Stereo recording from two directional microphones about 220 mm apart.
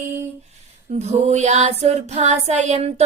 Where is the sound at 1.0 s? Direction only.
30° right (ahead or behind).